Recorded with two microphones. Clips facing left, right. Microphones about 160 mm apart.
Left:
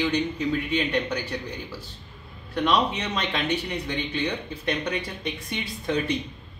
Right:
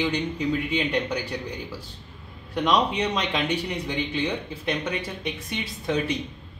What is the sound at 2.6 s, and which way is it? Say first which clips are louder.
Speech: right 1 dB; 15° right (ahead or behind).